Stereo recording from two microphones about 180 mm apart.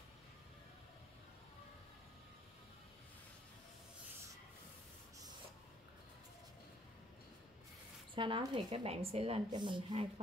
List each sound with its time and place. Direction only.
8.1 s speech: 25° right (ahead or behind)